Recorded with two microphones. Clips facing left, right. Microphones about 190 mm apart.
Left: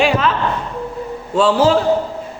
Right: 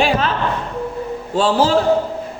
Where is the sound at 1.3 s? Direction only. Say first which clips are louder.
Left 3 dB; 30° right (ahead or behind).